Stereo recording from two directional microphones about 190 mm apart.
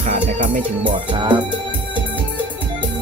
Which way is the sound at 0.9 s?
25° right (ahead or behind).